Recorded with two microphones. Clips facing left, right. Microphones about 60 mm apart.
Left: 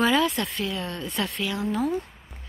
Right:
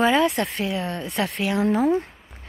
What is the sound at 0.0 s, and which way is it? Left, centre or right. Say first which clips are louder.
Speech: right 3 dB; right.